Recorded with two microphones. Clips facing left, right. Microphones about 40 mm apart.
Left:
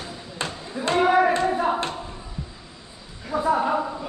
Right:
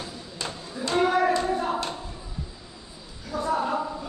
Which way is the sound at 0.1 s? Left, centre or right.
Left.